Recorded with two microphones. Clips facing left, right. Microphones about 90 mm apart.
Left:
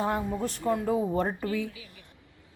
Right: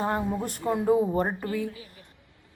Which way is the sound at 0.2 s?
10° right (ahead or behind).